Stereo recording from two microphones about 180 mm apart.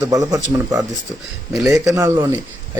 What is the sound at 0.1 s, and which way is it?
A man's voice, 20° right (ahead or behind).